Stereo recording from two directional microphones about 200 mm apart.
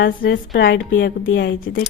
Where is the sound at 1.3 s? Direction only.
55° left (ahead or behind).